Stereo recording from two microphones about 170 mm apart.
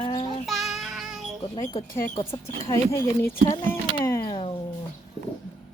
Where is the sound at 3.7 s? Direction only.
15° left (ahead or behind).